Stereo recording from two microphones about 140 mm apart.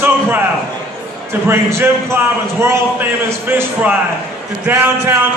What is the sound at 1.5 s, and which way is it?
A man's voice, 20° right (ahead or behind).